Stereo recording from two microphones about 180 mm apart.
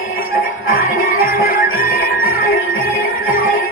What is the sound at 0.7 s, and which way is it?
Music, 55° left (ahead or behind).